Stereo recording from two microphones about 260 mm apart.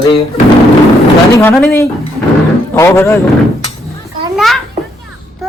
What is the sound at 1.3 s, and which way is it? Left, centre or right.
A man's voice, centre.